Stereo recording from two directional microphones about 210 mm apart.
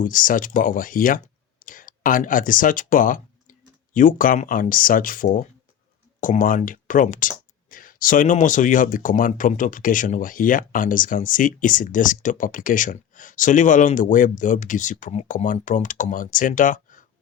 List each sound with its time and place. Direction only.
0.0 s speech: 40° left (ahead or behind)